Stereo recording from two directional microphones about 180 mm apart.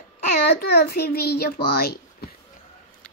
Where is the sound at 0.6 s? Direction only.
65° left (ahead or behind).